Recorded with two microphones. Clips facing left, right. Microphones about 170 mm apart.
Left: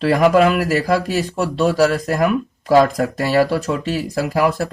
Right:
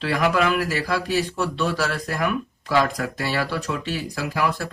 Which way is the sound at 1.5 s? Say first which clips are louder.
Left 12 dB; 40° left (ahead or behind).